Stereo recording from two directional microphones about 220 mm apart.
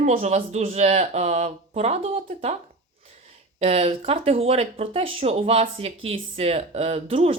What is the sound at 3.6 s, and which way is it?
Speech, 30° right (ahead or behind).